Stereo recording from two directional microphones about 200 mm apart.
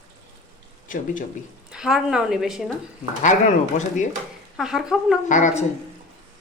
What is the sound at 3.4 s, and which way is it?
Speech, 35° left (ahead or behind).